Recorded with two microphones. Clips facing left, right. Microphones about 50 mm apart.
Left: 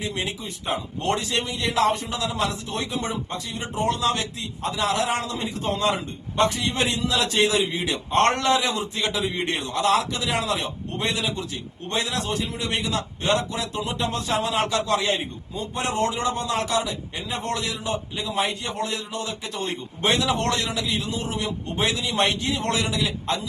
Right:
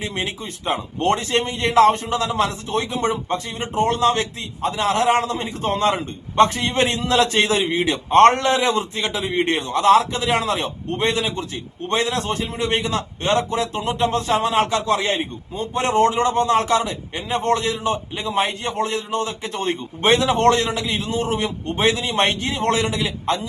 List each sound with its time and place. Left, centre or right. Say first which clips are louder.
0.0 s a man's voice: right 3 dB; right